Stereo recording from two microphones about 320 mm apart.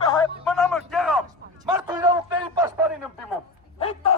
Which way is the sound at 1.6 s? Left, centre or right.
Centre.